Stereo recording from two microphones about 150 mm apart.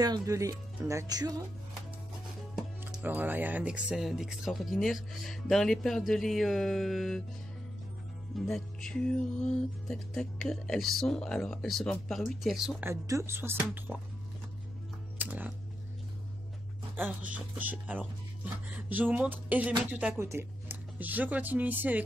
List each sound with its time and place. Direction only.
0.0 s speech: 25° right (ahead or behind)
3.0 s speech: 10° right (ahead or behind)
8.4 s speech: centre (ahead or behind)
12.8 s speech: 20° right (ahead or behind)
15.1 s music: 10° right (ahead or behind)
16.9 s speech: 10° right (ahead or behind)